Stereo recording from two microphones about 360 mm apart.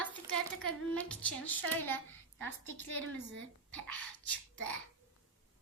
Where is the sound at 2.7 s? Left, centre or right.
Right.